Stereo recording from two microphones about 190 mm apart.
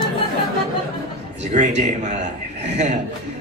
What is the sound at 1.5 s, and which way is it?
Speech, 40° right (ahead or behind).